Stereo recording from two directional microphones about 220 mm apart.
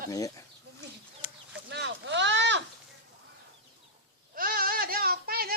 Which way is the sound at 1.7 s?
55° right (ahead or behind).